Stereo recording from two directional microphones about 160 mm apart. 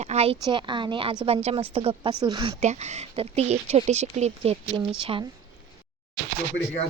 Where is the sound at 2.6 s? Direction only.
45° right (ahead or behind).